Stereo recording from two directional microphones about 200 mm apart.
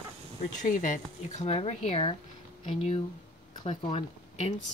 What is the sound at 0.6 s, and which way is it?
Speech, 40° left (ahead or behind).